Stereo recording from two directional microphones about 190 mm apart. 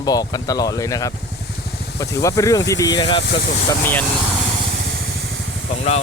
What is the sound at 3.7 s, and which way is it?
Speech, 10° left (ahead or behind).